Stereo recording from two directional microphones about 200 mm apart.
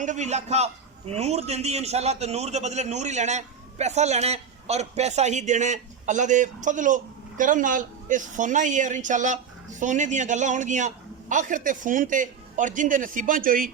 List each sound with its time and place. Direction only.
0.0 s a man's voice: 35° right (ahead or behind)